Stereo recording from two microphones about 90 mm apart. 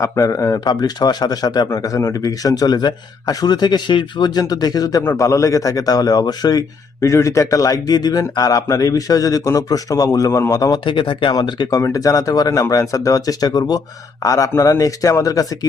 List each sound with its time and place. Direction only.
0.0 s speech: 35° left (ahead or behind)
0.6 s a man's voice: 50° left (ahead or behind)
1.7 s a man's voice: 40° left (ahead or behind)
7.0 s speech: 35° left (ahead or behind)
10.8 s speech: 65° left (ahead or behind)
11.8 s speech: 40° left (ahead or behind)